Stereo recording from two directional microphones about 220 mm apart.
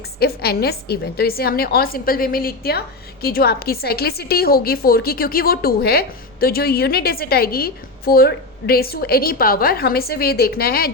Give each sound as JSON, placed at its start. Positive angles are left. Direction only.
{"t": 0.2, "sound": "a woman's voice", "side_deg": 45}